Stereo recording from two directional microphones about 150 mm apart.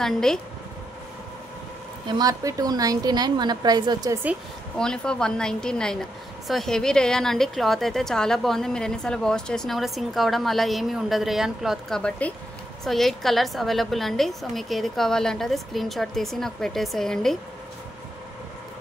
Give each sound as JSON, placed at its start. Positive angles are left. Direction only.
{"t": 0.0, "sound": "a woman's voice", "side_deg": 5}
{"t": 2.0, "sound": "a woman's voice", "side_deg": -25}
{"t": 4.7, "sound": "a woman's voice", "side_deg": 5}